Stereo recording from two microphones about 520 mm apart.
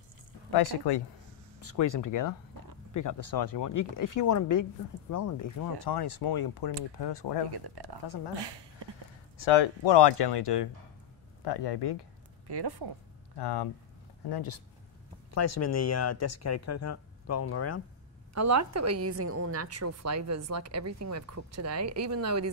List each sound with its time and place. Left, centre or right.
0.5 s speech: left
1.7 s speech: left
7.5 s speech: right
9.4 s speech: left
12.4 s speech: right
13.4 s speech: left
15.3 s speech: left
18.3 s a woman's voice: right